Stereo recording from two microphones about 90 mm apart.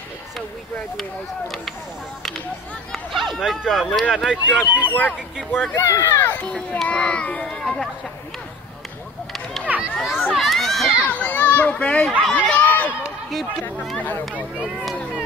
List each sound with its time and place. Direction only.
2.9 s speech: centre (ahead or behind)
4.9 s speech: 20° left (ahead or behind)
5.8 s a child's voice: 30° left (ahead or behind); by 7.9 s 5° left (ahead or behind)
9.9 s speech: centre (ahead or behind)
10.3 s a sound: centre (ahead or behind)
11.1 s children playing: 15° left (ahead or behind)
12.4 s chatter: 15° left (ahead or behind)
13.0 s run: centre (ahead or behind)